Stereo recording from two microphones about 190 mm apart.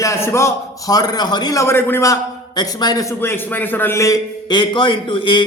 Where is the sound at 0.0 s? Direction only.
15° left (ahead or behind).